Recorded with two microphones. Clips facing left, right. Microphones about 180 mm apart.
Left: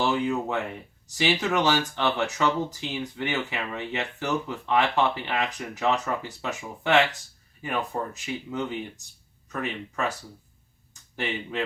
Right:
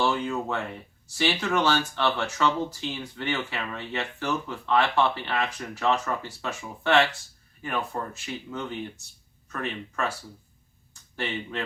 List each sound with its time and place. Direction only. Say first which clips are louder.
0.0 s speech: left 1 dB; 20° left (ahead or behind)